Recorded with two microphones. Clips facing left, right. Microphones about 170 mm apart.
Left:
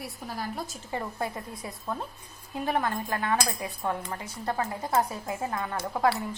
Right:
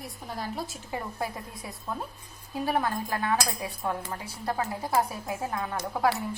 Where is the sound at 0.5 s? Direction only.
5° right (ahead or behind).